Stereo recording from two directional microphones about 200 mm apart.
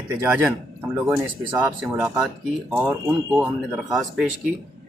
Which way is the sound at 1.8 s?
5° right (ahead or behind).